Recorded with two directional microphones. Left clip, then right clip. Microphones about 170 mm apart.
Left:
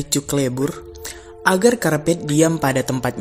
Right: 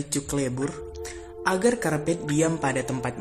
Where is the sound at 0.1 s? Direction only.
30° left (ahead or behind).